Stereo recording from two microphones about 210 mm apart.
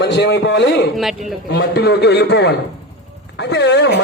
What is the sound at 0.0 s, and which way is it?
A woman's voice, 55° left (ahead or behind).